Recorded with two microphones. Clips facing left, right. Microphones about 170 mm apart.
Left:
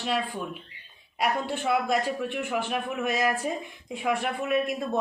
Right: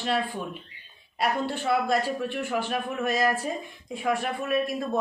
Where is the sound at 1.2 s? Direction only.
10° left (ahead or behind).